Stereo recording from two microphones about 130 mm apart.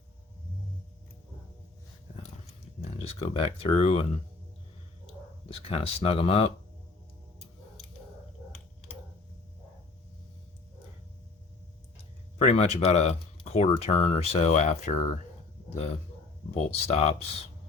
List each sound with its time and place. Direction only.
3.0 s speech: 50° left (ahead or behind)
5.5 s speech: 45° left (ahead or behind)
12.4 s speech: 55° left (ahead or behind)
16.5 s speech: 55° left (ahead or behind)